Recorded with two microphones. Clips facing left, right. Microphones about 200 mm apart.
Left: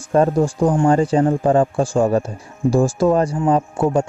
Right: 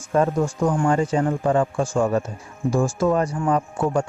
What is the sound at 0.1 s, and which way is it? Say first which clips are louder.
Speech: left 4 dB; 35° left (ahead or behind).